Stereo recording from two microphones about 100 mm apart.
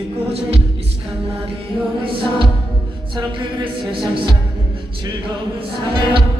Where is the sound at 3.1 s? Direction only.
60° right (ahead or behind).